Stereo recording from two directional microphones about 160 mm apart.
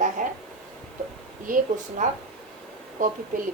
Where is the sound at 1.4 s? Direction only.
55° right (ahead or behind).